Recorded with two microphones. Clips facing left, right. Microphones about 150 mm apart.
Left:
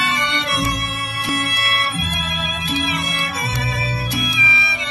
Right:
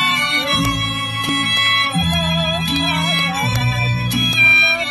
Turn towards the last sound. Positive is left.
turn(degrees=-25)  # may be behind; listen again after turning